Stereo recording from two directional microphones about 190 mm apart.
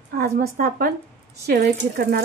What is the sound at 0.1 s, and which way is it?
A woman's voice, 55° right (ahead or behind).